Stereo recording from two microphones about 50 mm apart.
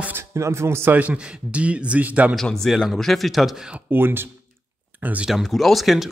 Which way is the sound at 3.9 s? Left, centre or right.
Right.